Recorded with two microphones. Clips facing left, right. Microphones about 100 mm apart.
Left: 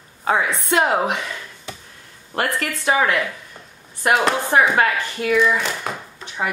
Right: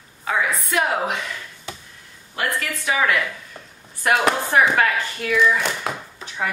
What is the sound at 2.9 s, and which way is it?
Speech, 35° left (ahead or behind).